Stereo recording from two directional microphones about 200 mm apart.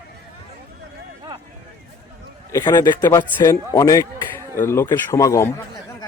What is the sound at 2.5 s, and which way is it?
Speech, 20° left (ahead or behind).